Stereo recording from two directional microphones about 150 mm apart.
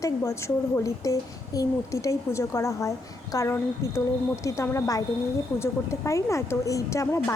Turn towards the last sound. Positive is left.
turn(degrees=20)  # may be behind; listen again after turning